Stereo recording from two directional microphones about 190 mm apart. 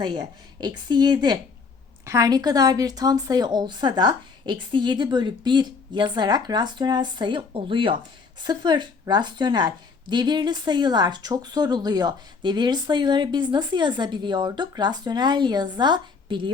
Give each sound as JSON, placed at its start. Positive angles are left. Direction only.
{"t": 0.0, "sound": "a woman's voice", "side_deg": -25}